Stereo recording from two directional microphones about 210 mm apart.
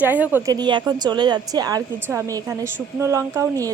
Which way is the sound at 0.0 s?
10° right (ahead or behind).